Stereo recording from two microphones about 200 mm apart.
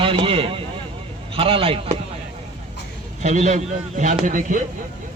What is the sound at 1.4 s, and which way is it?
Speech, 25° right (ahead or behind).